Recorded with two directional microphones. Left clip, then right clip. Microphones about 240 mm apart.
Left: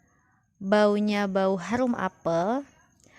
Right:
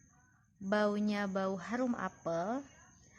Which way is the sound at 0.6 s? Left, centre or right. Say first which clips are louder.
Left 11 dB; left.